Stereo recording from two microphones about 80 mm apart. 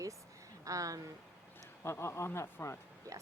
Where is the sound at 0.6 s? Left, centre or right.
Right.